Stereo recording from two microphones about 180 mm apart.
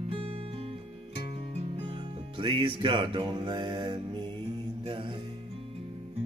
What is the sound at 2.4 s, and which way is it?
Music, 25° right (ahead or behind).